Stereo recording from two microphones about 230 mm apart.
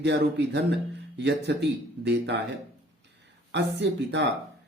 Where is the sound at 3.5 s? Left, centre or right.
Right.